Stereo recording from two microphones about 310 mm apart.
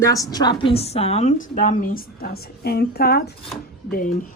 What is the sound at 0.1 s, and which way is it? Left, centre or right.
A woman's voice, centre.